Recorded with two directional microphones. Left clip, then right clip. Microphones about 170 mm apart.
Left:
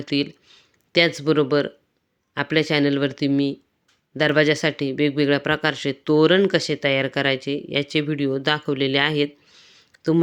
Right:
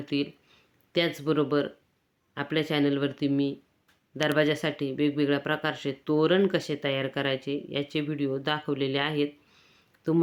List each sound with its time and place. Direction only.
0.0 s speech: 40° left (ahead or behind)